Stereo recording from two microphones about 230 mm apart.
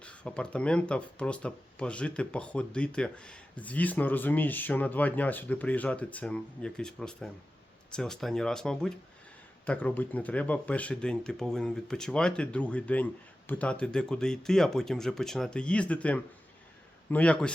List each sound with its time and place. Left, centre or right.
0.0 s speech: centre